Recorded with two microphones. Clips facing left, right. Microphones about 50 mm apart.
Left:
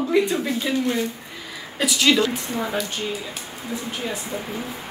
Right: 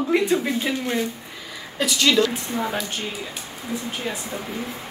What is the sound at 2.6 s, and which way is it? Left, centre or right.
Speech, centre.